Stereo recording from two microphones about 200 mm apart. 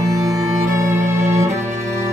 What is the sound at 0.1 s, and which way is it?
Music, 15° right (ahead or behind).